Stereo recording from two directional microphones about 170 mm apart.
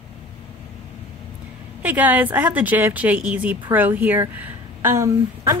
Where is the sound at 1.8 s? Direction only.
10° right (ahead or behind).